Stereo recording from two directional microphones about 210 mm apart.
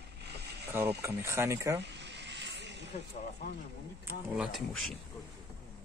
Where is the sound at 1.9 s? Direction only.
55° right (ahead or behind).